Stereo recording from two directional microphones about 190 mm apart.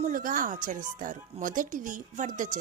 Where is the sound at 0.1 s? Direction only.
45° right (ahead or behind).